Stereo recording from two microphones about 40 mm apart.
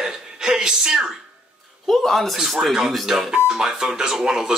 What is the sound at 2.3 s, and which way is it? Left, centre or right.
Speech, centre.